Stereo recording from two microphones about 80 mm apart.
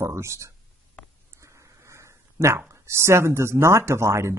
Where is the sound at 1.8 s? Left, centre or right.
Right.